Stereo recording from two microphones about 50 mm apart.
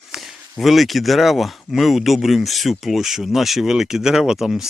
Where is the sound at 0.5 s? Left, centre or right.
Centre.